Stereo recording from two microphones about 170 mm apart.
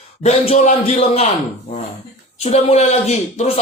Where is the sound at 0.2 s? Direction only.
40° left (ahead or behind).